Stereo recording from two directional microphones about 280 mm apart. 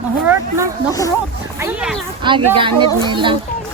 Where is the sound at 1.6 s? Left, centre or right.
Centre.